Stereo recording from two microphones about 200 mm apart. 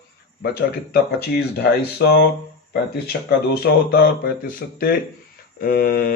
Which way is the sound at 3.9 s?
45° left (ahead or behind).